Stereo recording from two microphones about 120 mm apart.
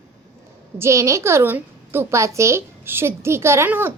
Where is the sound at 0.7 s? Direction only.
25° right (ahead or behind).